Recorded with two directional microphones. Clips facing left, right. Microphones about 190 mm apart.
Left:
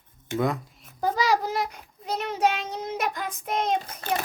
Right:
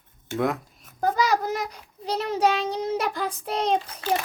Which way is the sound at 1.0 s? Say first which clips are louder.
Right 1 dB; 50° right (ahead or behind).